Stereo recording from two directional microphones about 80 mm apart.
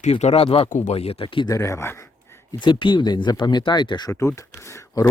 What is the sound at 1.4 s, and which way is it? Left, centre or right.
Speech, left.